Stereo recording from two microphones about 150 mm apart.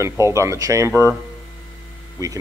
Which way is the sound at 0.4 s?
20° right (ahead or behind).